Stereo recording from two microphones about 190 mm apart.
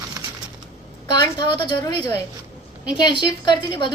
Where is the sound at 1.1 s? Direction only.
25° left (ahead or behind).